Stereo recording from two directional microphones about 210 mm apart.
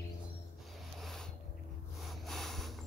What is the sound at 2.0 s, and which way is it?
Snort, centre (ahead or behind).